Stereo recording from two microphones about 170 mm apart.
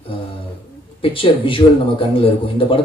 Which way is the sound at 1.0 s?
30° left (ahead or behind).